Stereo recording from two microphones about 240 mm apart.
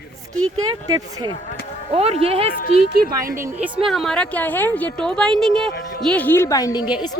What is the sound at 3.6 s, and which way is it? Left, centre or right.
A woman's voice, centre.